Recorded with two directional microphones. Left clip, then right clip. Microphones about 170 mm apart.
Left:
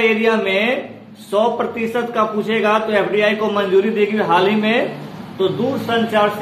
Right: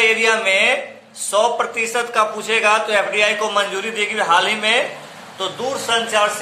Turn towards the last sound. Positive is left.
turn(degrees=-10)  # may be behind; listen again after turning